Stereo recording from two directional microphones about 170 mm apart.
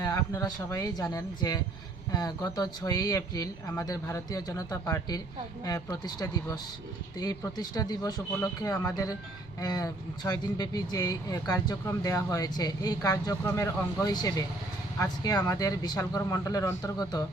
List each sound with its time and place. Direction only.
0.0 s speech: 20° left (ahead or behind)